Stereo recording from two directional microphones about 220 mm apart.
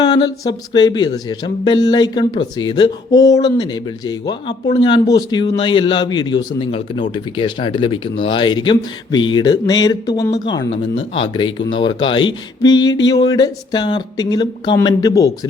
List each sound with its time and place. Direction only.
0.0 s speech: 20° left (ahead or behind)